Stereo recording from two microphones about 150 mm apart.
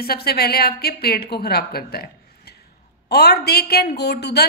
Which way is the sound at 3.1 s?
90° left.